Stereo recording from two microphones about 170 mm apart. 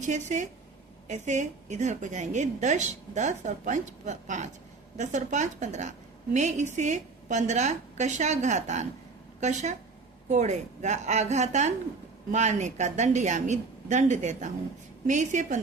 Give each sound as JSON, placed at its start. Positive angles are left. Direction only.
{"t": 0.0, "sound": "a woman's voice", "side_deg": -45}